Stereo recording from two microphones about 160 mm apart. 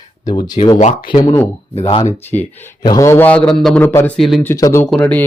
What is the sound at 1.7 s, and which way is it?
Speech, 40° left (ahead or behind).